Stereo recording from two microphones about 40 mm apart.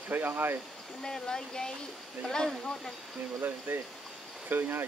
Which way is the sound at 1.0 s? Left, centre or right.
Centre.